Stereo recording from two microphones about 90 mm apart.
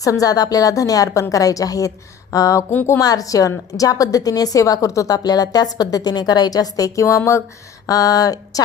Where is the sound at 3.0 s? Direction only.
40° left (ahead or behind).